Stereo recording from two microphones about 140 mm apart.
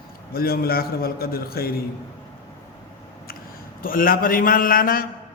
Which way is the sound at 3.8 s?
90° left.